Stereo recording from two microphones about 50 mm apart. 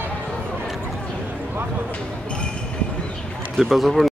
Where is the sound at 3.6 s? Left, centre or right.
Centre.